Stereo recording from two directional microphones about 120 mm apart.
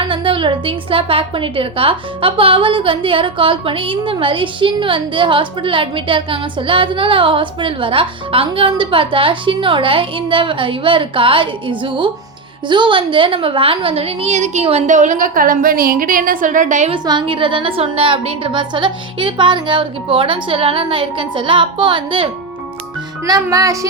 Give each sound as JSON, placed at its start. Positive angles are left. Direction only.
{"t": 0.0, "sound": "a woman's voice", "side_deg": -45}
{"t": 16.9, "sound": "a woman's voice", "side_deg": -45}
{"t": 23.2, "sound": "music", "side_deg": -30}